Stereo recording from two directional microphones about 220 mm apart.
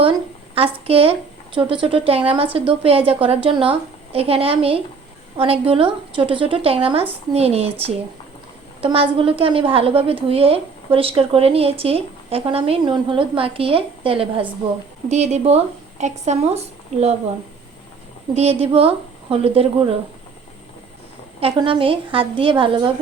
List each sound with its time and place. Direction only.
0.5 s a woman's voice: 25° right (ahead or behind)
18.3 s a woman's voice: 30° right (ahead or behind)
21.4 s a woman's voice: 25° right (ahead or behind)